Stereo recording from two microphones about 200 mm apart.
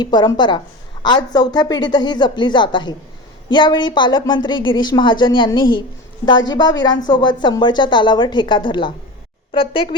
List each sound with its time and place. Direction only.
0.0 s speech: 20° left (ahead or behind)